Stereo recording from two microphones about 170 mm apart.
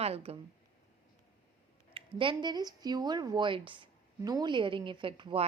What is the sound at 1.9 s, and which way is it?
A woman's voice, 30° right (ahead or behind).